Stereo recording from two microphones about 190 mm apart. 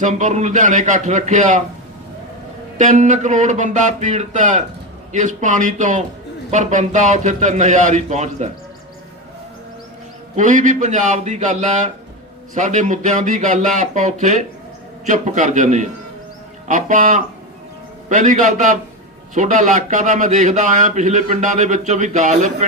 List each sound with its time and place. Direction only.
0.0 s a man's voice: 40° right (ahead or behind)
2.7 s a man's voice: 40° right (ahead or behind)
10.3 s a man's voice: 40° right (ahead or behind)